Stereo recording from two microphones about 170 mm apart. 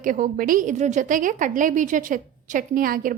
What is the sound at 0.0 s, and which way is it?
A woman's voice, 55° right (ahead or behind).